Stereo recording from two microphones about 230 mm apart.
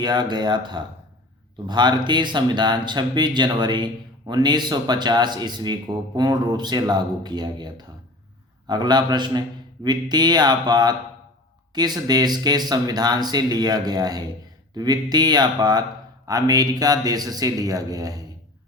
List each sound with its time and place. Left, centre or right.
0.0 s a man's voice: centre